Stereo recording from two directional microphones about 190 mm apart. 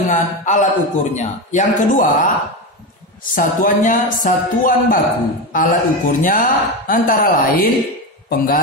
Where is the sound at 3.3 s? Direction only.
45° left (ahead or behind).